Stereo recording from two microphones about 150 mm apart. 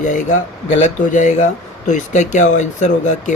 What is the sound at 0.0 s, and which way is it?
Speech, 55° left (ahead or behind).